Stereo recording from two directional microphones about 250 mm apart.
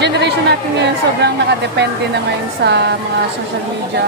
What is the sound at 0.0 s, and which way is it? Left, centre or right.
A woman's voice, right.